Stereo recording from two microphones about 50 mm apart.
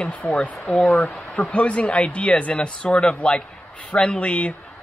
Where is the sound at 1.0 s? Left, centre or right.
Left.